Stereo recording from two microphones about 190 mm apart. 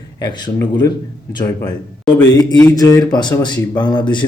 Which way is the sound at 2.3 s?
20° left (ahead or behind).